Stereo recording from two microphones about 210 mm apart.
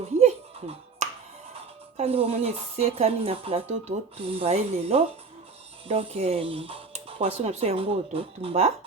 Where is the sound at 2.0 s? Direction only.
30° right (ahead or behind).